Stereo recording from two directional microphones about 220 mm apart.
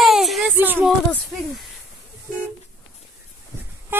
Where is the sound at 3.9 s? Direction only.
10° right (ahead or behind).